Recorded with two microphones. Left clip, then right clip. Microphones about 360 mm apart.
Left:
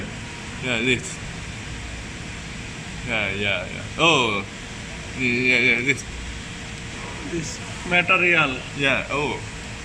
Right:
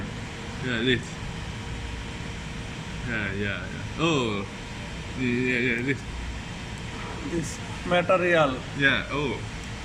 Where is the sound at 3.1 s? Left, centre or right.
Centre.